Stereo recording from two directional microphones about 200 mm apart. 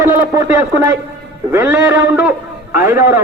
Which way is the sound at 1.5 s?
10° right (ahead or behind).